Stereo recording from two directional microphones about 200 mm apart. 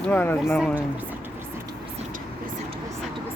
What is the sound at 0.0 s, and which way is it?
Speech, 10° left (ahead or behind).